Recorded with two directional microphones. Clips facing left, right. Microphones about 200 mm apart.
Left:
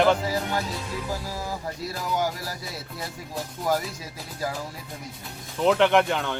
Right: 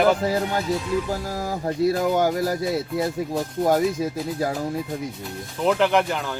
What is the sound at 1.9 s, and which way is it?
Speech, 55° right (ahead or behind).